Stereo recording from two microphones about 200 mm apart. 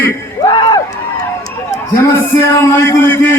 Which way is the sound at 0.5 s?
20° left (ahead or behind).